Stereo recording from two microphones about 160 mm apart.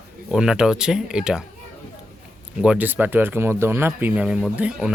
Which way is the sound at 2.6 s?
10° right (ahead or behind).